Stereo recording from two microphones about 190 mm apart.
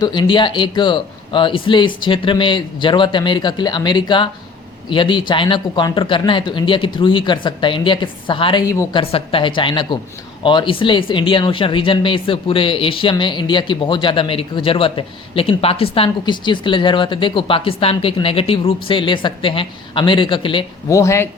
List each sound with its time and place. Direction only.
0.0 s speech: 25° left (ahead or behind)
9.0 s speech: 25° left (ahead or behind)
20.9 s speech: 15° left (ahead or behind)